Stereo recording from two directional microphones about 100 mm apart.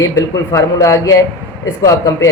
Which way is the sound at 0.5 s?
35° left (ahead or behind).